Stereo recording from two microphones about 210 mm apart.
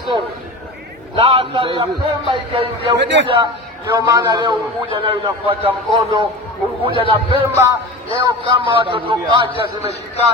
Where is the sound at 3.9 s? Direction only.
15° right (ahead or behind).